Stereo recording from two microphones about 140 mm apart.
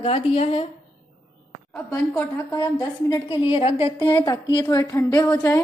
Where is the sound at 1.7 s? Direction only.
15° left (ahead or behind).